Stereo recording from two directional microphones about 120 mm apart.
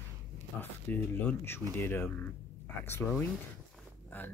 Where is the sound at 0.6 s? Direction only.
15° left (ahead or behind).